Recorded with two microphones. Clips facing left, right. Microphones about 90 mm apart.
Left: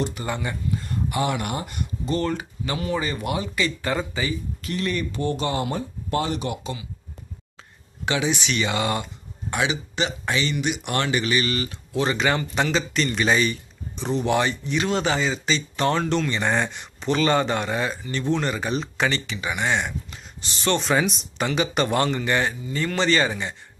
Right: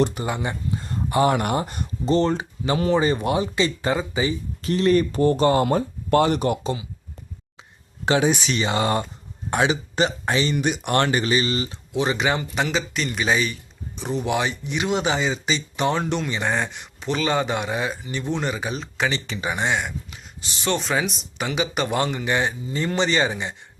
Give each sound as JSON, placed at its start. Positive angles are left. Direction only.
{"t": 0.2, "sound": "a sound", "side_deg": -20}
{"t": 1.2, "sound": "speech", "side_deg": -40}
{"t": 4.6, "sound": "speech", "side_deg": -35}
{"t": 8.0, "sound": "speech", "side_deg": -40}
{"t": 16.4, "sound": "speech", "side_deg": 0}
{"t": 19.3, "sound": "speech", "side_deg": -30}
{"t": 19.6, "sound": "speech", "side_deg": -5}